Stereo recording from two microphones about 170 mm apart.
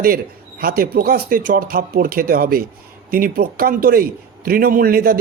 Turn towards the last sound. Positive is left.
turn(degrees=-60)  # may be behind; listen again after turning